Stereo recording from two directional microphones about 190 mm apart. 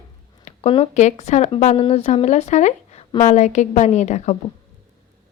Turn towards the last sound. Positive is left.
turn(degrees=40)  # may be behind; listen again after turning